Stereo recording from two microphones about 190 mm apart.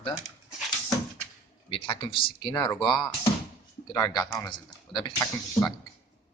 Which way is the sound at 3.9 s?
20° left (ahead or behind).